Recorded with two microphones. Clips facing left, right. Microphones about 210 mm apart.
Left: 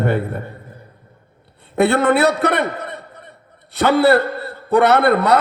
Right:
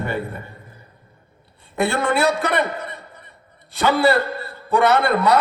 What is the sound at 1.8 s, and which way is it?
A man's voice, 60° left (ahead or behind).